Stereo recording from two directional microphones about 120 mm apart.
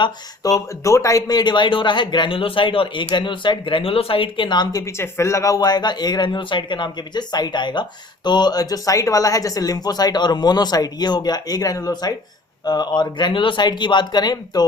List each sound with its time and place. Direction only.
0.0 s speech: 30° left (ahead or behind)
4.9 s speech: 25° left (ahead or behind)